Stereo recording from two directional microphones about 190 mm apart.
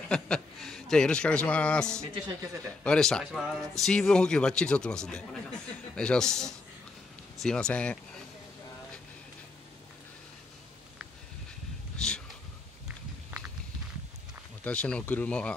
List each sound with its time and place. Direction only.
0.1 s a man's voice: 5° left (ahead or behind)
2.2 s a man's voice: 15° right (ahead or behind)
2.8 s speech: 5° left (ahead or behind)
12.0 s a sound: 5° left (ahead or behind)
14.6 s speech: 5° left (ahead or behind)